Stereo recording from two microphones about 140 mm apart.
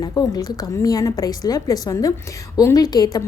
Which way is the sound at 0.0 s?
25° left (ahead or behind).